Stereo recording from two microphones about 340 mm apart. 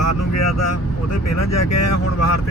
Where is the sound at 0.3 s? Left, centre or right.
Left.